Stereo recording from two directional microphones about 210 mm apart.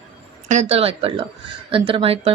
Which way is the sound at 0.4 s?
35° right (ahead or behind).